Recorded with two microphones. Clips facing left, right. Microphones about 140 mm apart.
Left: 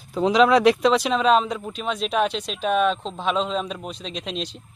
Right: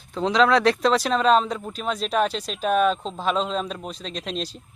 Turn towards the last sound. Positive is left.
turn(degrees=0)  # may be behind; listen again after turning